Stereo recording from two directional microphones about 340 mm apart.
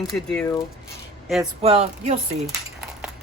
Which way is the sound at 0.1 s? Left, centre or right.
Centre.